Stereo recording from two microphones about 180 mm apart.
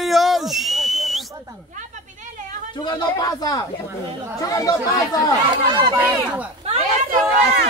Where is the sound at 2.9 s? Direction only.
20° left (ahead or behind).